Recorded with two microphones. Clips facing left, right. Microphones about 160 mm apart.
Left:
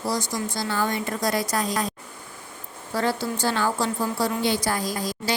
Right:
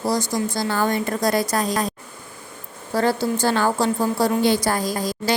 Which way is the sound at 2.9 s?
40° right (ahead or behind).